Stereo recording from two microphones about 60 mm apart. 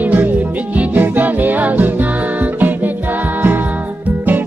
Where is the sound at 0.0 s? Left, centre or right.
Right.